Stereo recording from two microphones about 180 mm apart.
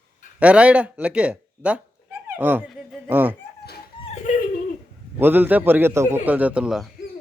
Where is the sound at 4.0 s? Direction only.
35° left (ahead or behind).